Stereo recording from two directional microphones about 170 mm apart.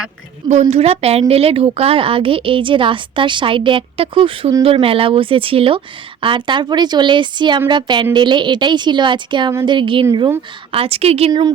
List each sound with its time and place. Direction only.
0.4 s a woman's voice: 40° right (ahead or behind); by 10.3 s 25° right (ahead or behind)
10.7 s a woman's voice: 35° right (ahead or behind)
11.3 s a woman's voice: 25° right (ahead or behind)